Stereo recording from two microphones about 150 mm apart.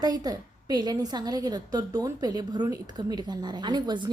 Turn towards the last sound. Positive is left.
turn(degrees=-30)  # may be behind; listen again after turning